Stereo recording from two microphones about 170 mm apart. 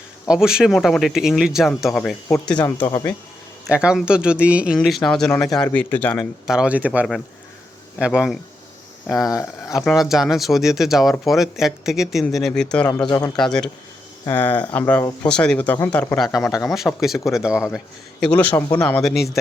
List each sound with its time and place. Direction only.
0.3 s speech: 5° right (ahead or behind)
2.7 s speech: 15° left (ahead or behind)
3.7 s speech: 5° right (ahead or behind)
5.3 s speech: 20° left (ahead or behind)
6.5 s speech: 5° right (ahead or behind)
9.2 s speech: 20° left (ahead or behind)
9.7 s speech: centre (ahead or behind)
18.2 s speech: 10° left (ahead or behind)